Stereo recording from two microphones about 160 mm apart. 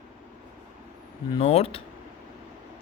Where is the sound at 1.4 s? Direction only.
40° left (ahead or behind).